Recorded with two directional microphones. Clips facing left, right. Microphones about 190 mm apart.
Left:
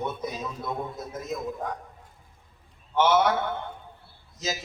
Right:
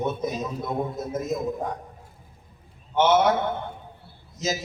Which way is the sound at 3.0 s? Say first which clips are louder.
Right 2 dB; 20° right (ahead or behind).